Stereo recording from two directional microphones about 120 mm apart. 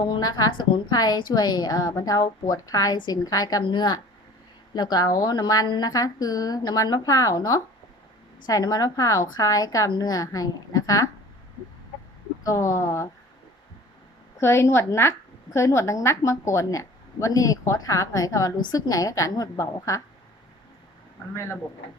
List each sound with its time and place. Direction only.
0.1 s a woman's voice: 35° left (ahead or behind)
12.4 s a woman's voice: 30° left (ahead or behind)
14.3 s a woman's voice: 20° left (ahead or behind)